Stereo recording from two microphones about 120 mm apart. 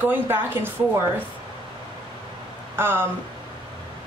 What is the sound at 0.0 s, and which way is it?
Speech, 15° right (ahead or behind).